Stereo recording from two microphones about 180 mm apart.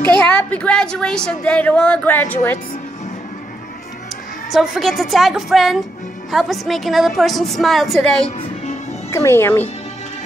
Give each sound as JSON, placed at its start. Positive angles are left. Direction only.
{"t": 0.0, "sound": "a woman's voice", "side_deg": 5}
{"t": 4.5, "sound": "a woman's voice", "side_deg": 0}
{"t": 9.1, "sound": "a woman's voice", "side_deg": 15}